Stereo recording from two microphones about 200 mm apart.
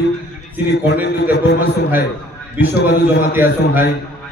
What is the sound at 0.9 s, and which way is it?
A man's voice, 60° left (ahead or behind).